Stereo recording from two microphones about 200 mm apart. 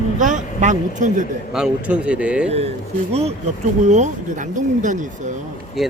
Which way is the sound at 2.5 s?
30° right (ahead or behind).